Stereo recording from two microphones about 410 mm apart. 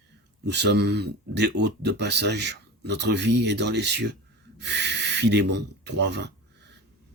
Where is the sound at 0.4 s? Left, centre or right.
Right.